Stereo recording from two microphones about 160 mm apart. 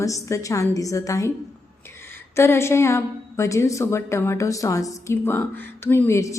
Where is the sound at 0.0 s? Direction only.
20° left (ahead or behind).